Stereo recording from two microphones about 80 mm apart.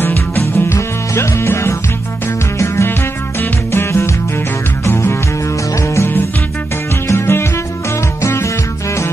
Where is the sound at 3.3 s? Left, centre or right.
Left.